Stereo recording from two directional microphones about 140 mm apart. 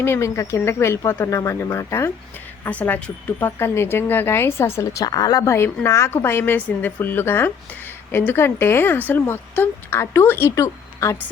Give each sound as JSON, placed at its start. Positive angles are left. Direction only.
{"t": 0.0, "sound": "speech", "side_deg": 20}